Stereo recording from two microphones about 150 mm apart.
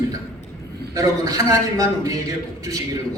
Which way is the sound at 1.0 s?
20° right (ahead or behind).